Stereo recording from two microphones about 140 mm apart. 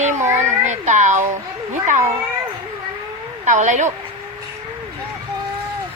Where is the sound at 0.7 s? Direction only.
60° right (ahead or behind).